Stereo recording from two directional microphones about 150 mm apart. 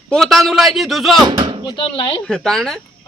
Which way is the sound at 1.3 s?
35° right (ahead or behind).